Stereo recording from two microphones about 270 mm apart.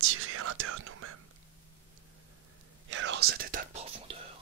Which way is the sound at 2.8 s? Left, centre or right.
Right.